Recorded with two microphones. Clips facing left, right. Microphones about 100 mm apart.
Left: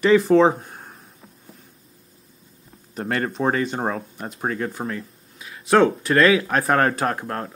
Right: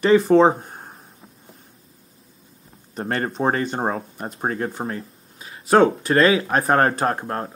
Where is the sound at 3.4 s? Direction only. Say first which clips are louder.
Right 1 dB; 30° right (ahead or behind).